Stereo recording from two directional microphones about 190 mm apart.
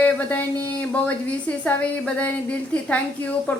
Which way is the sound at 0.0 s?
5° left (ahead or behind).